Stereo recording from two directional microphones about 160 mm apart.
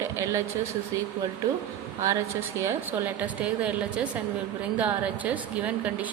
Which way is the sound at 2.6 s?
10° right (ahead or behind).